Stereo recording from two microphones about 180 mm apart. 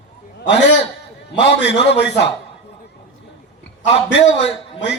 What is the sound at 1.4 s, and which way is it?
Speech, 70° left (ahead or behind).